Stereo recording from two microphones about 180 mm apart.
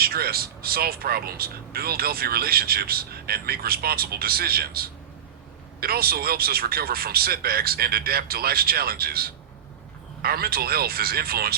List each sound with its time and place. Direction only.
0.0 s speech: 55° right (ahead or behind)